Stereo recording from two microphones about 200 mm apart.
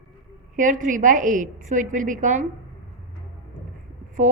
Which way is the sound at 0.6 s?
40° right (ahead or behind).